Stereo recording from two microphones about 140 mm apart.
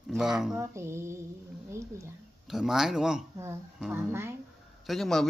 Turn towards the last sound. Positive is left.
turn(degrees=0)  # may be behind; listen again after turning